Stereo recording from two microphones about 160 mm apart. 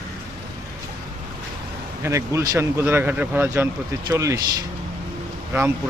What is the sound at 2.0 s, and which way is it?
Speech, 20° right (ahead or behind).